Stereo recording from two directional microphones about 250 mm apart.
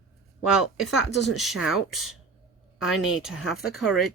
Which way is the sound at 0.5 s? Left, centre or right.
Centre.